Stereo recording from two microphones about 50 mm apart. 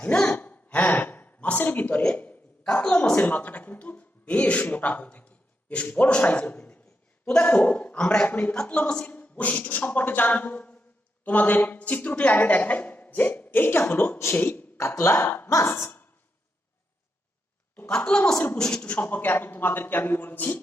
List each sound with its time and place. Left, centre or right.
0.0 s speech: left
0.3 s gasp: left
2.1 s a sound: left
2.9 s a sound: left
4.7 s a man's voice: left
7.5 s speech: left
8.3 s a woman's voice: left
14.8 s speech: left
15.2 s speech: left
17.8 s a woman's voice: centre
18.8 s speech: left
19.0 s a woman's voice: left